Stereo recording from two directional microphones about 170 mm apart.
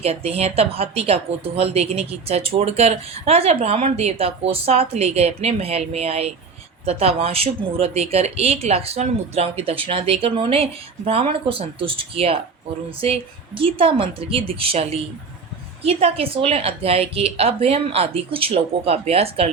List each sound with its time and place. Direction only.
0.0 s a woman's voice: 35° right (ahead or behind)